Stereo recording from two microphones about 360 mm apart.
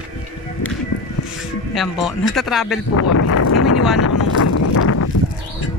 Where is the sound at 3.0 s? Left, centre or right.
Left.